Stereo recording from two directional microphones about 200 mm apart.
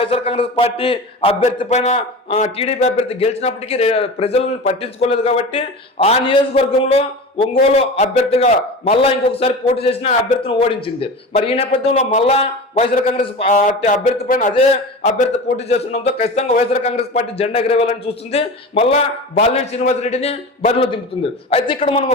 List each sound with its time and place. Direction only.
0.0 s a man's voice: 30° left (ahead or behind)
10.4 s a man's voice: 25° left (ahead or behind)
12.9 s a man's voice: 45° left (ahead or behind)
13.1 s a man's voice: 30° left (ahead or behind)